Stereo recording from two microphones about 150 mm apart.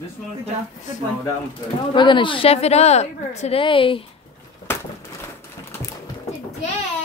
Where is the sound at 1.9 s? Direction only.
30° left (ahead or behind).